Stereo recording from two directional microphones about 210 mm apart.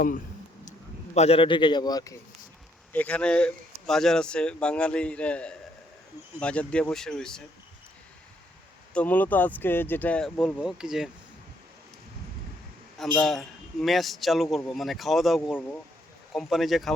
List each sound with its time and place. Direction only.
1.1 s a man's voice: 30° left (ahead or behind)
2.9 s speech: 5° left (ahead or behind)
8.9 s speech: 5° left (ahead or behind)
13.0 s speech: centre (ahead or behind)